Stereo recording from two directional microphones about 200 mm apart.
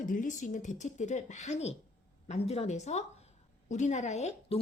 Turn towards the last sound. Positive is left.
turn(degrees=35)  # may be behind; listen again after turning